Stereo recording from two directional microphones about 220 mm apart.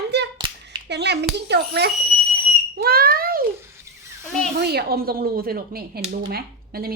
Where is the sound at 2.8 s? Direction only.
45° right (ahead or behind).